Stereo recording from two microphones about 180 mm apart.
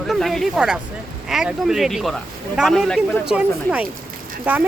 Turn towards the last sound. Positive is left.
turn(degrees=-10)  # may be behind; listen again after turning